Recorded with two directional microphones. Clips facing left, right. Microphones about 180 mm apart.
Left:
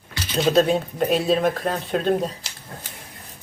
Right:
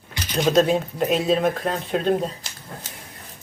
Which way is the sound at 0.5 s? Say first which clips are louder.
Right 1 dB; 35° left (ahead or behind).